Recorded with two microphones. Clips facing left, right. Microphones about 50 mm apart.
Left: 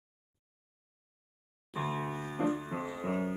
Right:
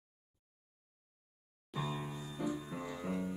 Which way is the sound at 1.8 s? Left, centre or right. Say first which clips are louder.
Left 6 dB; left.